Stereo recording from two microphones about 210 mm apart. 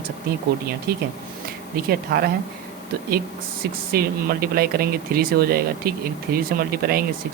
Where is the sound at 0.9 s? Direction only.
45° right (ahead or behind).